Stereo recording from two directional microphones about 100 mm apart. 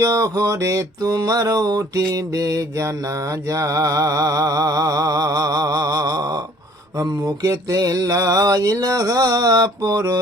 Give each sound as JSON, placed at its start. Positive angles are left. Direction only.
{"t": 0.0, "sound": "mantra", "side_deg": -35}